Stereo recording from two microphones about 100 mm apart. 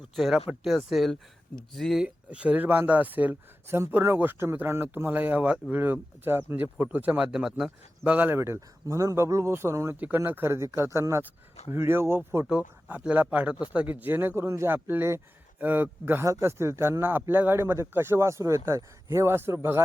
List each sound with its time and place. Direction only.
0.2 s speech: centre (ahead or behind)
8.4 s speech: 30° right (ahead or behind)
12.5 s speech: 10° right (ahead or behind)